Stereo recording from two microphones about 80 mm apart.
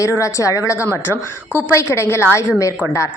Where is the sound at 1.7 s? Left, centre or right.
Left.